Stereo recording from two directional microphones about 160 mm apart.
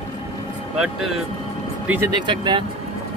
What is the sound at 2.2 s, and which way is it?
Speech, 30° right (ahead or behind).